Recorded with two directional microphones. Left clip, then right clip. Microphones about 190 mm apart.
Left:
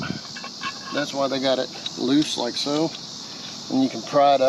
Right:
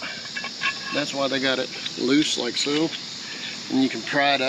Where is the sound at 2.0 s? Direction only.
35° left (ahead or behind).